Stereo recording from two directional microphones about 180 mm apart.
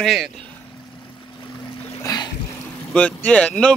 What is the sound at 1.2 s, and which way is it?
Boat, 25° left (ahead or behind).